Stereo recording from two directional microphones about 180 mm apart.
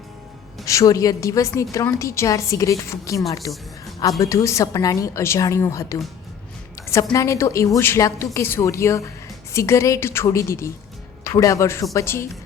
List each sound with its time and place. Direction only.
0.6 s a woman's voice: 15° left (ahead or behind)